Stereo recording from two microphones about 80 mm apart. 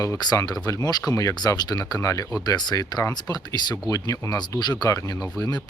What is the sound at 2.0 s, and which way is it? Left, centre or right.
Speech, left.